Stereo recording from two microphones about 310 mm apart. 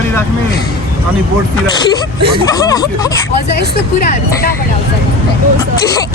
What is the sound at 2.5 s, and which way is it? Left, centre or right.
Speech, centre.